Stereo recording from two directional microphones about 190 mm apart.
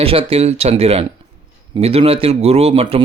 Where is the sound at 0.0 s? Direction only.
30° right (ahead or behind).